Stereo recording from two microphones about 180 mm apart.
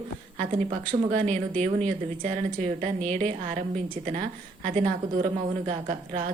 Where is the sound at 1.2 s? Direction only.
40° right (ahead or behind).